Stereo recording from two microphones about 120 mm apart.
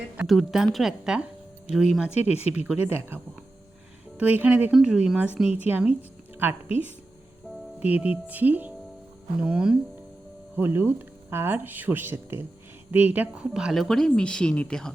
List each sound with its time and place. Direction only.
0.3 s a woman's voice: centre (ahead or behind)
2.3 s speech: 60° left (ahead or behind)
2.6 s speech: 15° right (ahead or behind)
4.2 s a woman's voice: 10° right (ahead or behind)
6.0 s a sound: 15° right (ahead or behind)
7.8 s speech: 15° right (ahead or behind)
10.6 s a woman's voice: 20° right (ahead or behind); by 14.9 s 5° left (ahead or behind)